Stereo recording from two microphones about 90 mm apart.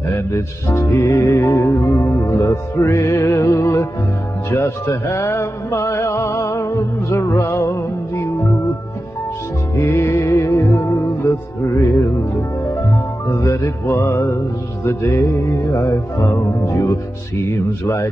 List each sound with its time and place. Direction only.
0.1 s music: 30° left (ahead or behind)
9.8 s music: 30° left (ahead or behind)
13.3 s music: 35° left (ahead or behind)